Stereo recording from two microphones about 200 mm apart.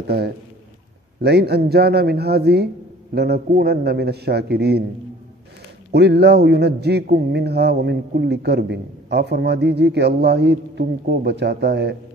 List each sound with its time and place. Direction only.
0.0 s speech: 50° right (ahead or behind)
5.9 s speech: 55° right (ahead or behind)